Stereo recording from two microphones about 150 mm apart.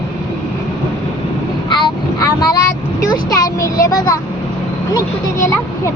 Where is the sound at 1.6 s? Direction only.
30° left (ahead or behind).